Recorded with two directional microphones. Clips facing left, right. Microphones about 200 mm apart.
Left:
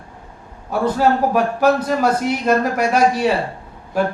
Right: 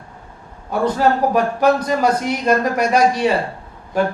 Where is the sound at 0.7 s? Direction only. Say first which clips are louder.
Even; 5° left (ahead or behind).